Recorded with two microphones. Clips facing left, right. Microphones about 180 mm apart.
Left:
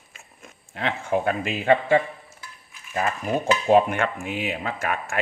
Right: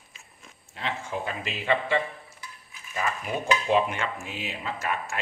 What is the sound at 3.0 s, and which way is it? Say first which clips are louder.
Dishes: left 5 dB; 45° left (ahead or behind).